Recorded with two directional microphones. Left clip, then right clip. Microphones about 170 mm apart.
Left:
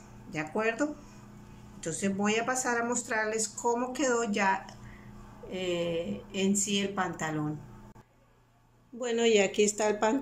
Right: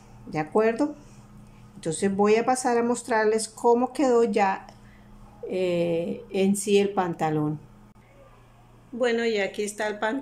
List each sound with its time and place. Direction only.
0.3 s speech: 30° right (ahead or behind)
8.9 s speech: 5° left (ahead or behind)